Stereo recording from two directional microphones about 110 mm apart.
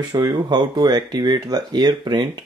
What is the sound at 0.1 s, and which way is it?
Speech, 40° right (ahead or behind).